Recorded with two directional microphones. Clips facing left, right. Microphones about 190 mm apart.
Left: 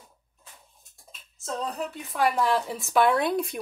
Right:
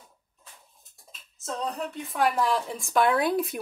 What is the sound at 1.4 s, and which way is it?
Speech, centre (ahead or behind).